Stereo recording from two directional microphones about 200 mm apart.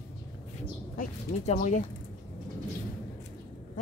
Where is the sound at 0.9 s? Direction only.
35° left (ahead or behind).